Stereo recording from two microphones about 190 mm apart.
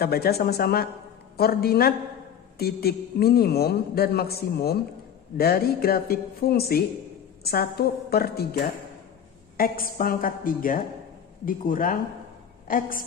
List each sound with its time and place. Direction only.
0.0 s a man's voice: 55° left (ahead or behind)
9.6 s a woman's voice: 50° left (ahead or behind)